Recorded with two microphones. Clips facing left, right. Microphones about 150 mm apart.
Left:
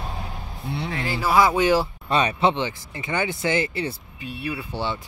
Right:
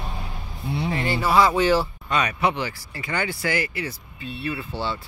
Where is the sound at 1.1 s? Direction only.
10° left (ahead or behind).